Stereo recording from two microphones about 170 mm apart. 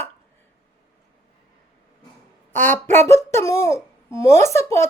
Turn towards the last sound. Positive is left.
turn(degrees=15)  # may be behind; listen again after turning